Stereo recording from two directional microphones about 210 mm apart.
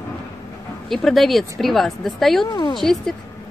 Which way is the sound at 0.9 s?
Centre (ahead or behind).